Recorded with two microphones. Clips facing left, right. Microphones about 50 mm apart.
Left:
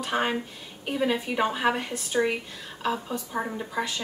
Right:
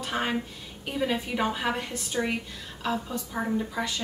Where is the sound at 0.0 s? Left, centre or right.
Centre.